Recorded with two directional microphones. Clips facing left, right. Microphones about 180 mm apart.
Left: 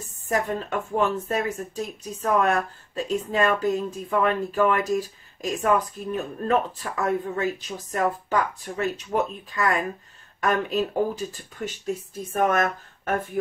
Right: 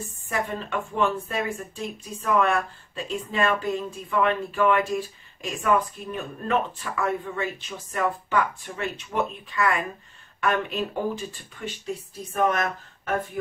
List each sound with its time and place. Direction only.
0.3 s speech: 40° left (ahead or behind)